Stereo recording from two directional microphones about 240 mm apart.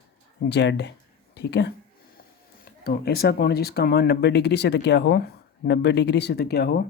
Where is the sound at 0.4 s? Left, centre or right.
Left.